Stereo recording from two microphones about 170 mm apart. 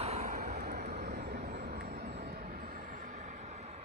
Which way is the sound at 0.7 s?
70° right (ahead or behind).